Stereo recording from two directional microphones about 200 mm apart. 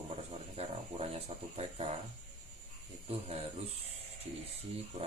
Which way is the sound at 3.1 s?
30° right (ahead or behind).